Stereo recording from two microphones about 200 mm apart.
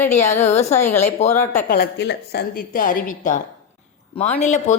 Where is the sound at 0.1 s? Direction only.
35° left (ahead or behind).